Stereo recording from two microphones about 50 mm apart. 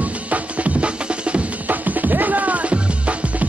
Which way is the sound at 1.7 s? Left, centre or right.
Right.